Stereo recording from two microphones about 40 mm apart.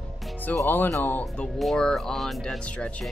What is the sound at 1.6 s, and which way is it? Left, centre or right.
Speech, centre.